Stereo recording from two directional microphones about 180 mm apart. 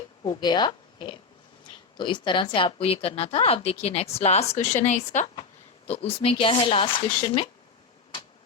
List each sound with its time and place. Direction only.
0.3 s a woman's voice: 25° left (ahead or behind)